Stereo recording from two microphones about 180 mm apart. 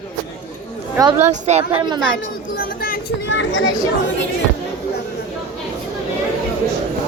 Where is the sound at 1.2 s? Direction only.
40° right (ahead or behind).